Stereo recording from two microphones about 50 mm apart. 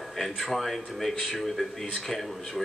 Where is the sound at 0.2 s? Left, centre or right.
Centre.